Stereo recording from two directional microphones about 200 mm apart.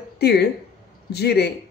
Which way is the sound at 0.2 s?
55° left (ahead or behind).